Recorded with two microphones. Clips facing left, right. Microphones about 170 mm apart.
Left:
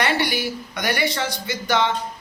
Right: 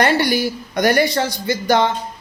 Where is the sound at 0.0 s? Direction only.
40° right (ahead or behind).